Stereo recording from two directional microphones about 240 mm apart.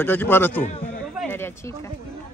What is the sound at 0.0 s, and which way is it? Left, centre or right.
Speech, centre.